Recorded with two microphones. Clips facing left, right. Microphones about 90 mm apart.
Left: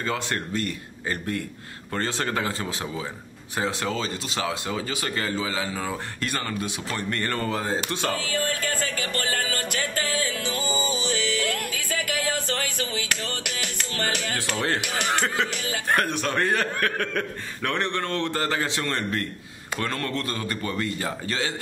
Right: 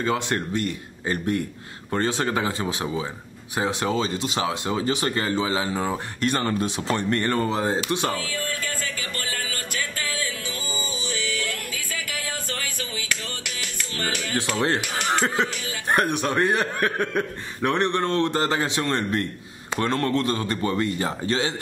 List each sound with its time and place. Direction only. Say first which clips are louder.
0.0 s speech: right 4 dB; 20° right (ahead or behind)
8.3 s music: left 3 dB; 50° left (ahead or behind)
14.6 s speech: right 1 dB; 20° right (ahead or behind)